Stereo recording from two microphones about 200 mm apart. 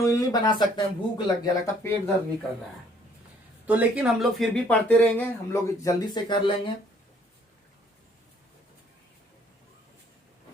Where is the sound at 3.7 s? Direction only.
5° right (ahead or behind); by 6.5 s 20° left (ahead or behind).